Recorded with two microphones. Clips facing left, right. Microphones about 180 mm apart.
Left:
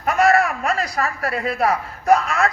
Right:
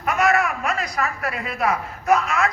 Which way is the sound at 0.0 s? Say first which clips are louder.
Left 3 dB; 35° left (ahead or behind).